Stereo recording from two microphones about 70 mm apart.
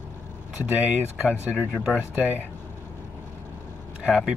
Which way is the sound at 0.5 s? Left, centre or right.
Centre.